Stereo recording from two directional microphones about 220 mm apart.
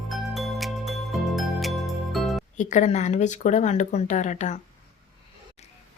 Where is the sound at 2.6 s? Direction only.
35° left (ahead or behind).